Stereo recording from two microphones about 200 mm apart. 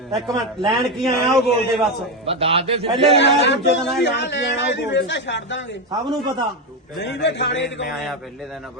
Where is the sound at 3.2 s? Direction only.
60° left (ahead or behind).